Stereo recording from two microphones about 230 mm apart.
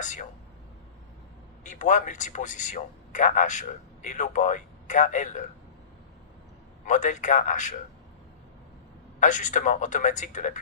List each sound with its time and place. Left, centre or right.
0.0 s a man's voice: left
1.6 s a man's voice: left
6.8 s a man's voice: left
9.2 s a man's voice: left